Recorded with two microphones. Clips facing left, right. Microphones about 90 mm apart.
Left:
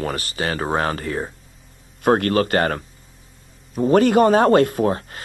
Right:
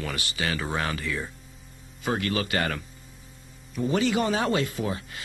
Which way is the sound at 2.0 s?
55° left (ahead or behind).